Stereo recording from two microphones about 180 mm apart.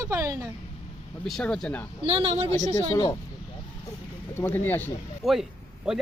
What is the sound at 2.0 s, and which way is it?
Speech, 30° right (ahead or behind).